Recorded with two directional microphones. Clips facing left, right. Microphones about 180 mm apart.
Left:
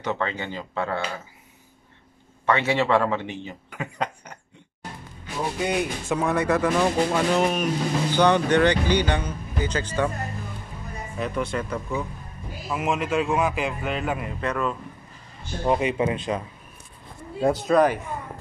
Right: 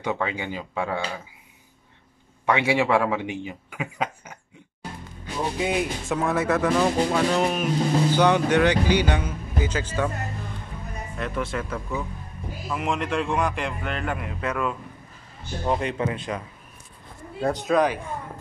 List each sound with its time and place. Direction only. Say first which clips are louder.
0.0 s a man's voice: even; 10° right (ahead or behind)
2.4 s a man's voice: even; 10° right (ahead or behind)
5.4 s speech: even; centre (ahead or behind)
11.1 s speech: left 2 dB; centre (ahead or behind)
14.4 s speech: even; 5° right (ahead or behind)
15.6 s speech: left 3 dB; 5° left (ahead or behind)
16.1 s a man's voice: left 3 dB; 20° left (ahead or behind)
17.6 s speech: left 2 dB; centre (ahead or behind)